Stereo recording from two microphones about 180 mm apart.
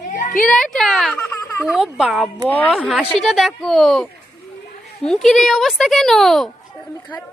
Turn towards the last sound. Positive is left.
turn(degrees=0)  # may be behind; listen again after turning